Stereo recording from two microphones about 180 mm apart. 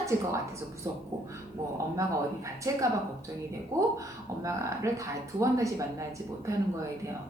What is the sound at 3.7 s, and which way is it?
A woman's voice, 15° right (ahead or behind).